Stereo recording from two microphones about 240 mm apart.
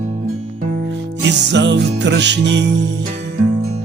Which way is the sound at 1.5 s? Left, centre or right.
Right.